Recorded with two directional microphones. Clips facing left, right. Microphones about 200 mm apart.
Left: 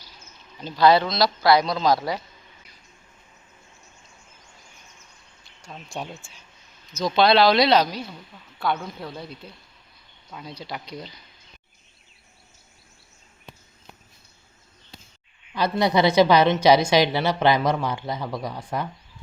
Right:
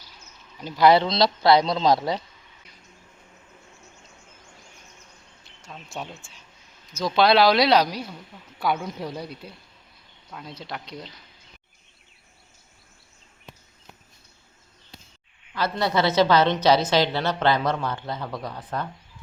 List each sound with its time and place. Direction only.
0.6 s speech: 15° right (ahead or behind)
5.9 s speech: centre (ahead or behind)
10.6 s speech: centre (ahead or behind)
15.5 s a woman's voice: 15° left (ahead or behind)